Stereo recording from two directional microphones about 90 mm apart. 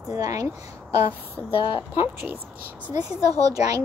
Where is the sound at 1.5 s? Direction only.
90° left.